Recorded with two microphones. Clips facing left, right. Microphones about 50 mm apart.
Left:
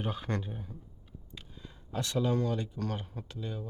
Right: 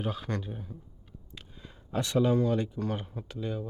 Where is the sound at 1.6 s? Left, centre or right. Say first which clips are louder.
Right 4 dB; centre.